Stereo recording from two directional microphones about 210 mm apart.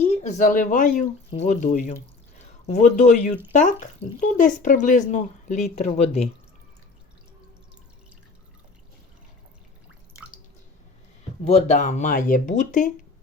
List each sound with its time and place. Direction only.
0.0 s speech: 30° left (ahead or behind)
11.4 s speech: 30° left (ahead or behind)